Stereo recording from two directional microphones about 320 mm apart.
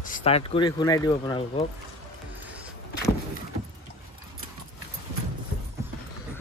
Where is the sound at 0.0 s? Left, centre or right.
Left.